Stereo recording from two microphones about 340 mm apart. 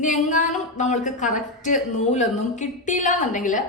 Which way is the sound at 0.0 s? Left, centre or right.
Left.